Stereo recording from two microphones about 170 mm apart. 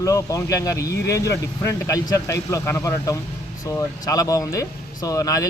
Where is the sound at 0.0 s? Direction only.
20° left (ahead or behind).